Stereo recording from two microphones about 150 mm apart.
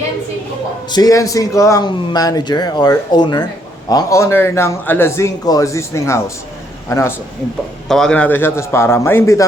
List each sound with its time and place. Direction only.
0.9 s speech: 25° left (ahead or behind)
7.9 s a man's voice: 5° left (ahead or behind)